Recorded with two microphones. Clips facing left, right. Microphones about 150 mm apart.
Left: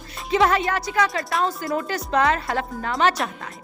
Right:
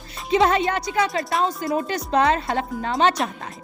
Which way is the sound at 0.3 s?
25° right (ahead or behind).